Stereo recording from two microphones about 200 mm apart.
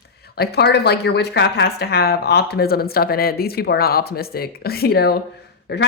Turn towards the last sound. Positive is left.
turn(degrees=55)  # may be behind; listen again after turning